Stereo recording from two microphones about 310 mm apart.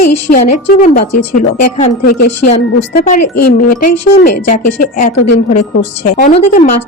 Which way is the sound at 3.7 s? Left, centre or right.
Left.